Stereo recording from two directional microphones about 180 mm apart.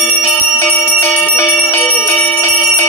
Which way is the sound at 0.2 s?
15° left (ahead or behind).